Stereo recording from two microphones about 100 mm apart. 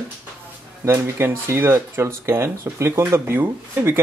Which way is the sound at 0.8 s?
25° right (ahead or behind).